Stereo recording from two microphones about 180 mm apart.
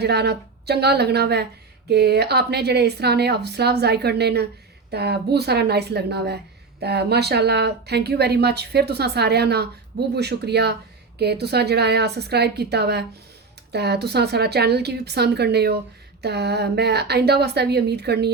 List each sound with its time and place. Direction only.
0.0 s a woman's voice: 65° right (ahead or behind)